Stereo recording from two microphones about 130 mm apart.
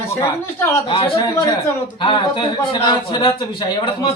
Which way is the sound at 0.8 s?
40° left (ahead or behind).